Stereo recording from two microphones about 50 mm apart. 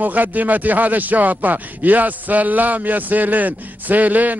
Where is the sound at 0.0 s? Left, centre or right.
Right.